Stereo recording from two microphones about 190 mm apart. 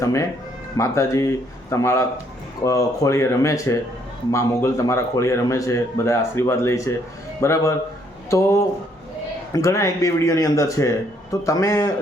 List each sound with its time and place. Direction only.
0.0 s a man's voice: 15° left (ahead or behind)